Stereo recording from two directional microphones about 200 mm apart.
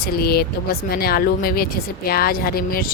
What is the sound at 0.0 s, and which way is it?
Speech, 50° left (ahead or behind).